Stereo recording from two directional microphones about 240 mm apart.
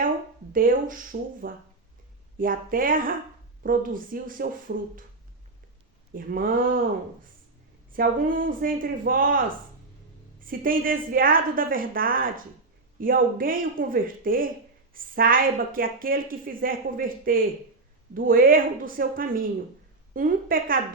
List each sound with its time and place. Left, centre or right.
0.5 s a woman's voice: right
6.1 s a woman's voice: right
7.9 s a woman's voice: right